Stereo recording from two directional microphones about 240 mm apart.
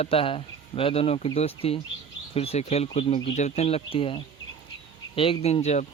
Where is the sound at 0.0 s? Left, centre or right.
Left.